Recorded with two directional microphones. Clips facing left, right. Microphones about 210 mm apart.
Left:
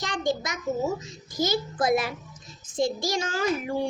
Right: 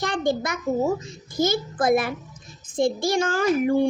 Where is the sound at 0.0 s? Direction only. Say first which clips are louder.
Right 4 dB; 55° right (ahead or behind).